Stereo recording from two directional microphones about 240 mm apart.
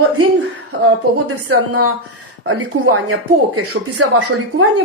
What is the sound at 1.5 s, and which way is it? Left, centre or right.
A woman's voice, right.